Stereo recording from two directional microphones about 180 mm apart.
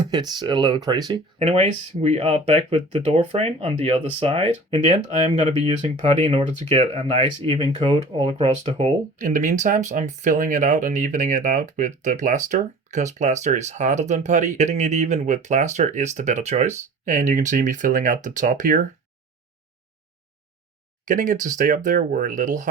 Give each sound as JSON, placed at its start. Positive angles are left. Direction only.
{"t": 0.0, "sound": "speech", "side_deg": -25}
{"t": 1.4, "sound": "speech", "side_deg": -35}
{"t": 21.0, "sound": "speech", "side_deg": -45}